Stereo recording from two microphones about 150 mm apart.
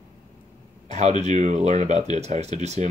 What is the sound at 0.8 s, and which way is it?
Speech, 50° right (ahead or behind).